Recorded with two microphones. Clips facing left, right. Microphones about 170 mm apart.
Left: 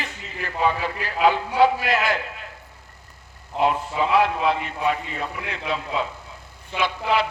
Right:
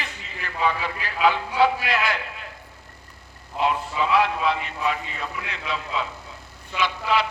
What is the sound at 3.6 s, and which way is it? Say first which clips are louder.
A man's voice: left 2 dB; 50° left (ahead or behind).